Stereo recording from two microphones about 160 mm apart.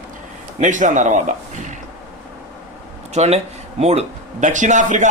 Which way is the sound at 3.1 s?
45° right (ahead or behind).